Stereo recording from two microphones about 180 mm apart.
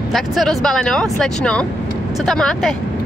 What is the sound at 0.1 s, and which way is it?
Speech, centre (ahead or behind).